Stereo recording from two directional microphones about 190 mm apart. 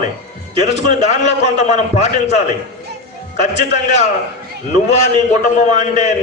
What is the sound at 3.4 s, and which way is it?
Speech, 35° left (ahead or behind).